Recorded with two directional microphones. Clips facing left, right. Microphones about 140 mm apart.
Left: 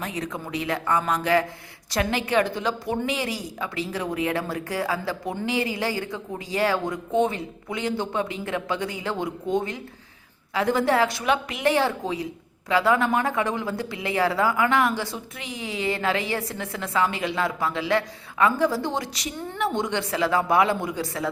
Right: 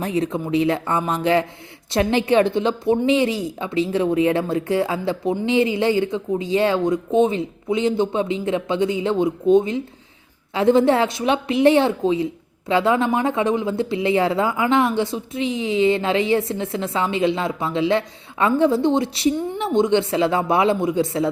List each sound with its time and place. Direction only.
0.0 s a woman's voice: 30° right (ahead or behind)